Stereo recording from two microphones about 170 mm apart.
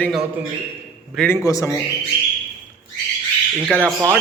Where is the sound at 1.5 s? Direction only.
20° left (ahead or behind).